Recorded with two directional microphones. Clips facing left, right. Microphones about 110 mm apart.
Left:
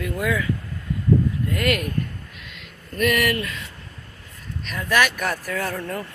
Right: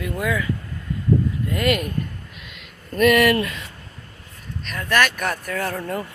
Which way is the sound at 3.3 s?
35° right (ahead or behind).